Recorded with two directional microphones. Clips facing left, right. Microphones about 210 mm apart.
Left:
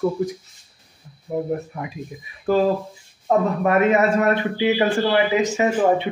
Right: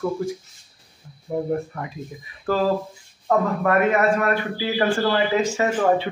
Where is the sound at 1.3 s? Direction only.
10° left (ahead or behind).